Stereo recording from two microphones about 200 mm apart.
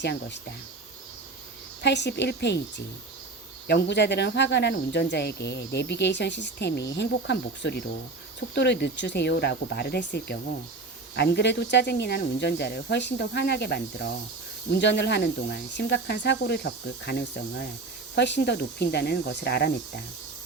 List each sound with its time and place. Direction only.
0.0 s speech: 60° left (ahead or behind)
1.8 s speech: 60° left (ahead or behind)